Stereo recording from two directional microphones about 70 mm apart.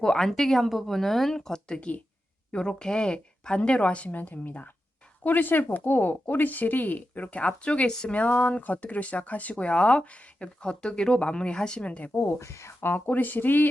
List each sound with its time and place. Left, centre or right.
0.0 s speech: centre
12.1 s speech: left